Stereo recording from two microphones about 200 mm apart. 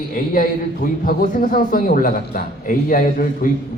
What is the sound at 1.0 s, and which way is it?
A man's voice, 45° left (ahead or behind).